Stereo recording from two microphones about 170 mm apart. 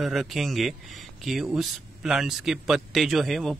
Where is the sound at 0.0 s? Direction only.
Centre (ahead or behind).